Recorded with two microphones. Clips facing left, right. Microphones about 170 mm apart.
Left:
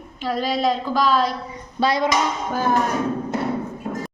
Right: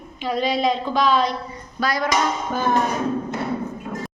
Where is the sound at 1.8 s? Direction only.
25° left (ahead or behind).